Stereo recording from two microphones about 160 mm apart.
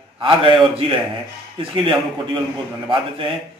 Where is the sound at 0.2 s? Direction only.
30° right (ahead or behind).